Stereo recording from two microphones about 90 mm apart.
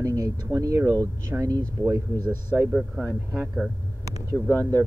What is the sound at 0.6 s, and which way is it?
Speech, 35° right (ahead or behind).